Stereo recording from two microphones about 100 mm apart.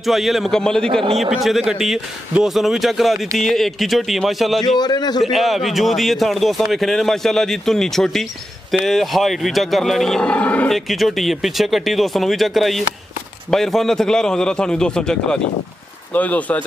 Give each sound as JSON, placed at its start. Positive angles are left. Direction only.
{"t": 0.0, "sound": "a man's voice", "side_deg": 0}
{"t": 4.7, "sound": "a man's voice", "side_deg": 45}
{"t": 5.2, "sound": "a man's voice", "side_deg": 0}
{"t": 10.7, "sound": "a man's voice", "side_deg": 0}